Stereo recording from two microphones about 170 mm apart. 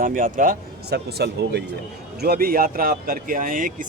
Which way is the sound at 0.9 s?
80° right.